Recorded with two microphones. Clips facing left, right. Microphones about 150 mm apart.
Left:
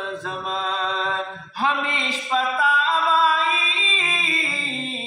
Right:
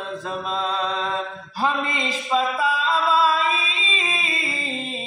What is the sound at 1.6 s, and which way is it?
Mantra, 35° right (ahead or behind).